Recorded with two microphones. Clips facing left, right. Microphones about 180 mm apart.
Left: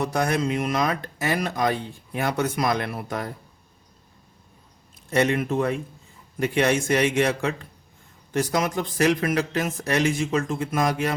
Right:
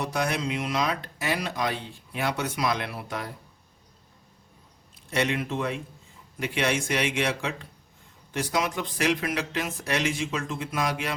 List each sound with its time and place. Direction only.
0.0 s speech: 50° left (ahead or behind)
5.1 s speech: 45° left (ahead or behind)